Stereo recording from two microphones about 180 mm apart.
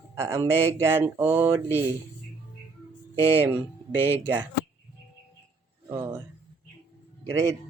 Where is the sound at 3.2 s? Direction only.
10° right (ahead or behind).